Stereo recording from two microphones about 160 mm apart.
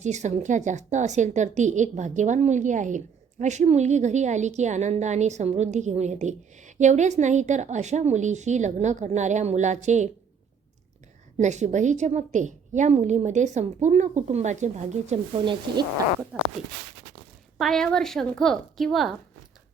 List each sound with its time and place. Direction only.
0.0 s a woman's voice: 45° right (ahead or behind)
11.3 s a woman's voice: 45° right (ahead or behind)
17.6 s a woman's voice: centre (ahead or behind)